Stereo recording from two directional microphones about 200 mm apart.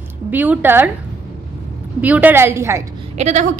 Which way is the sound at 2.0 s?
10° right (ahead or behind).